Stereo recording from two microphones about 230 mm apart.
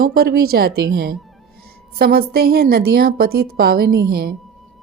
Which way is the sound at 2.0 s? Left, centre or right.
Right.